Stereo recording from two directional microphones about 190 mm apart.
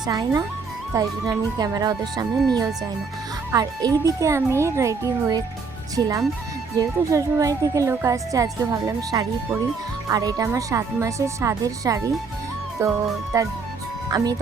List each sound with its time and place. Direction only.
0.0 s speech: 20° right (ahead or behind)
3.5 s speech: 20° right (ahead or behind)